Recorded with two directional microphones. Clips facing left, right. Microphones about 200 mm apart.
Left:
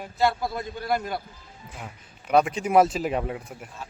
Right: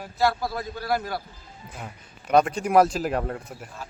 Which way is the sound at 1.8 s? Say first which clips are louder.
Right 1 dB; 5° left (ahead or behind).